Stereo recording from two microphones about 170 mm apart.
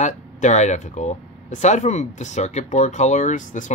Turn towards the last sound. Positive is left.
turn(degrees=45)  # may be behind; listen again after turning